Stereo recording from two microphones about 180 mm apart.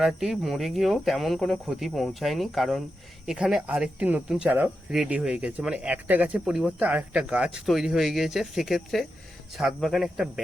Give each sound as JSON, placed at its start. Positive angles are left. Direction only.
{"t": 0.0, "sound": "speech", "side_deg": 0}